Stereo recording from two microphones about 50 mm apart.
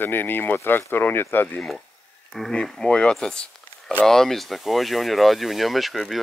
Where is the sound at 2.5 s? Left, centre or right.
Centre.